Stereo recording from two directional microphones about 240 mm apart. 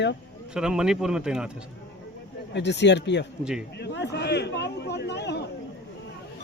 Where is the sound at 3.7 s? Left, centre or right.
Left.